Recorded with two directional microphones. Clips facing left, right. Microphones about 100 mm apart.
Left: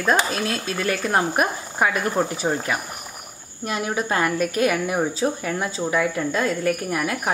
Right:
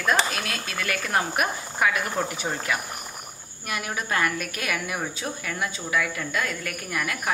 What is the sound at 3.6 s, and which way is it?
A woman's voice, 30° left (ahead or behind).